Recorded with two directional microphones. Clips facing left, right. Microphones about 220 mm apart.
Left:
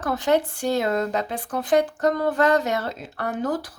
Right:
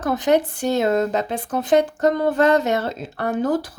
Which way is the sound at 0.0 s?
20° right (ahead or behind).